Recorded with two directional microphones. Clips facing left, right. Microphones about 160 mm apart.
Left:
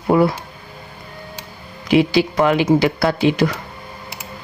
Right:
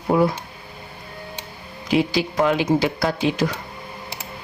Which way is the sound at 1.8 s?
70° left (ahead or behind).